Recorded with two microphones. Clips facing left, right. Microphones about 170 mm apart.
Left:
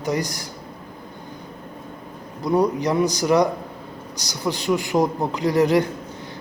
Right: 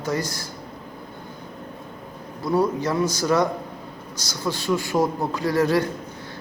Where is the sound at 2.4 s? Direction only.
15° left (ahead or behind).